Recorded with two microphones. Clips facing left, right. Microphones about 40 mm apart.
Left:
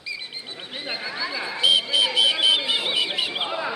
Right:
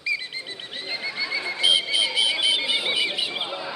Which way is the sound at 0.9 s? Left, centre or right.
Centre.